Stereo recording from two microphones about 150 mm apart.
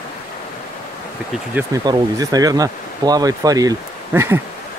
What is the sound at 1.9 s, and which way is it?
Speech, 25° right (ahead or behind).